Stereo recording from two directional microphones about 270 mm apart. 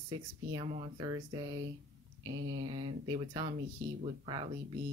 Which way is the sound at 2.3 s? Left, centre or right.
Right.